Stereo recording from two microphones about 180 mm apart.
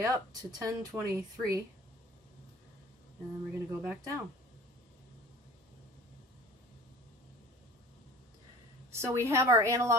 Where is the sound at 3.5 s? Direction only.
15° right (ahead or behind).